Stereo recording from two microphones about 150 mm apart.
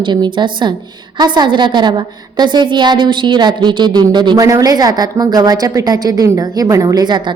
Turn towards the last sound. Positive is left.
turn(degrees=-30)  # may be behind; listen again after turning